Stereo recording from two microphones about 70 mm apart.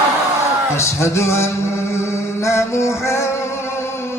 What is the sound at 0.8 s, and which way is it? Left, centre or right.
Music, left.